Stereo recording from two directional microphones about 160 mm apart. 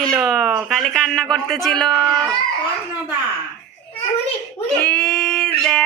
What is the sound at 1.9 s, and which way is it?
Speech, 25° right (ahead or behind).